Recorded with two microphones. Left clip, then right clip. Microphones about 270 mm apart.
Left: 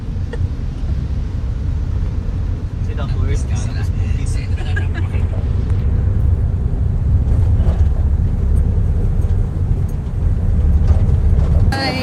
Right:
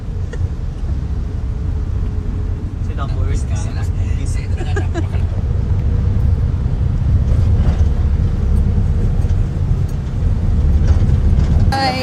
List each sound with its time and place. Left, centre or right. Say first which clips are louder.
11.7 s vehicle: right 4 dB; centre